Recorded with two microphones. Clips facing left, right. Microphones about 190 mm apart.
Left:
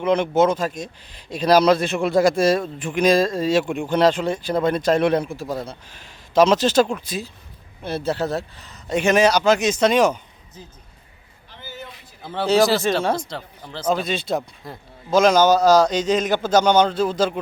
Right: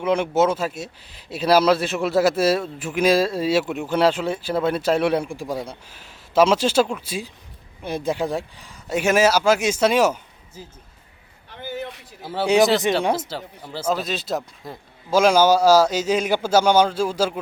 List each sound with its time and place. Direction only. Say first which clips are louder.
0.0 s speech: left 2 dB; 5° right (ahead or behind)
11.6 s a sound: right 7 dB; 65° right (ahead or behind)
12.2 s speech: even; 5° right (ahead or behind)